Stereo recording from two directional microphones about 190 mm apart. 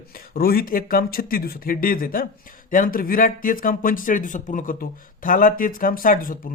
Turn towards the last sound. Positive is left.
turn(degrees=45)  # may be behind; listen again after turning